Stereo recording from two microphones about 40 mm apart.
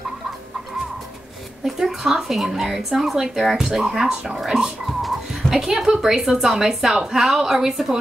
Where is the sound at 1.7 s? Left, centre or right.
Centre.